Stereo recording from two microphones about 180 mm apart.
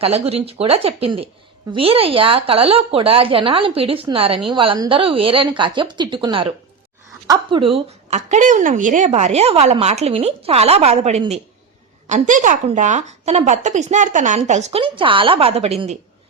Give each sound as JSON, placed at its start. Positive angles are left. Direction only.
{"t": 0.0, "sound": "a woman's voice", "side_deg": -35}